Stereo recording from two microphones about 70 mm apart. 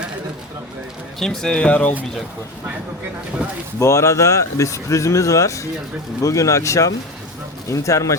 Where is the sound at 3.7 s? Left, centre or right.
Left.